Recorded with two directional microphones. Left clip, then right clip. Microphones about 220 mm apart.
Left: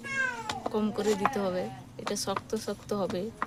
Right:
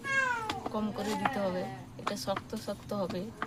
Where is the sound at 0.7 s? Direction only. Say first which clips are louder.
Left 6 dB; 45° left (ahead or behind).